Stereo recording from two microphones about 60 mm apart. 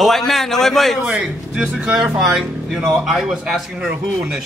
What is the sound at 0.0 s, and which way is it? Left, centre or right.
A man's voice, centre.